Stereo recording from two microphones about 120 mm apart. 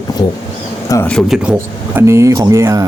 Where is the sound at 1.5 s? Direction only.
25° right (ahead or behind).